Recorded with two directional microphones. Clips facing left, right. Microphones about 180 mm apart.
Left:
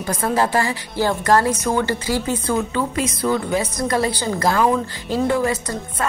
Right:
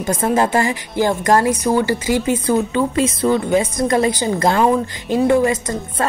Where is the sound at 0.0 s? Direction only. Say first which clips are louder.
Right 3 dB; 25° right (ahead or behind).